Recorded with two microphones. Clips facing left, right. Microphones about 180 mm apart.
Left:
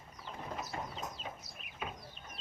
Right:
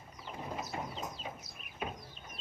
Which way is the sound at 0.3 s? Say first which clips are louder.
Right 2 dB; 15° right (ahead or behind).